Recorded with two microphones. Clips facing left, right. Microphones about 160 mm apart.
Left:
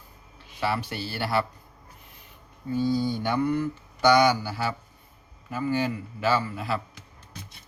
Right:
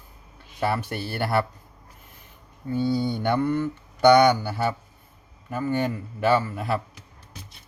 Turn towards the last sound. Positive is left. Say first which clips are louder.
# right 3 dB
turn(degrees=-55)  # may be behind; listen again after turning